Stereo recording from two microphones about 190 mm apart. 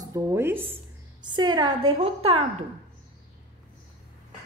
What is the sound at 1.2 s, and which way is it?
A woman's voice, 25° right (ahead or behind).